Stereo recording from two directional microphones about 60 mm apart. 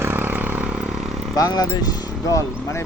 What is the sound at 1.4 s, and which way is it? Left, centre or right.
Speech, left.